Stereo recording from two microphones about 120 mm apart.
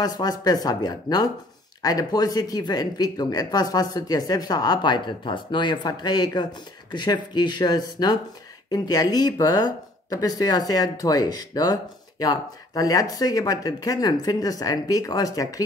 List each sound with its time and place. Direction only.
0.0 s speech: 30° left (ahead or behind)